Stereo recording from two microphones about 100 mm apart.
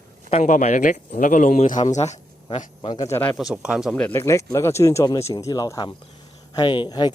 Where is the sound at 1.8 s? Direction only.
75° left (ahead or behind).